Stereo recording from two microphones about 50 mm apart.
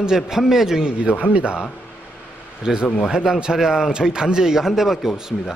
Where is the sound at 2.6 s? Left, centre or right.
Centre.